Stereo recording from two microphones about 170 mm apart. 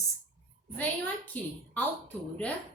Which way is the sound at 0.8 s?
10° left (ahead or behind).